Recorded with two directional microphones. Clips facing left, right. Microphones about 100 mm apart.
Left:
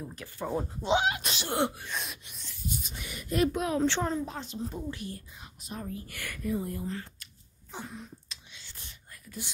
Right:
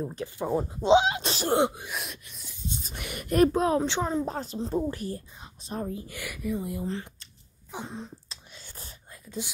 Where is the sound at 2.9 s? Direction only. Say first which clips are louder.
Right 7 dB; 60° right (ahead or behind).